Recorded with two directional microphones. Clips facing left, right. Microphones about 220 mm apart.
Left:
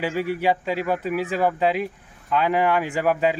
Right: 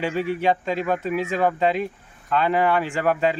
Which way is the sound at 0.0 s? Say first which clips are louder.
Even; 10° left (ahead or behind).